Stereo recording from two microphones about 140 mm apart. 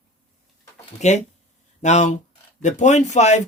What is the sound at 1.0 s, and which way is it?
Speech, 55° left (ahead or behind).